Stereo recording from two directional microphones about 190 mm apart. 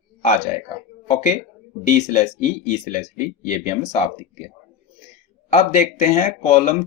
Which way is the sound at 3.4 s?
40° left (ahead or behind).